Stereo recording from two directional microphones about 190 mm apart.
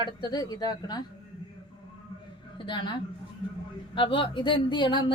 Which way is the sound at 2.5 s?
25° left (ahead or behind).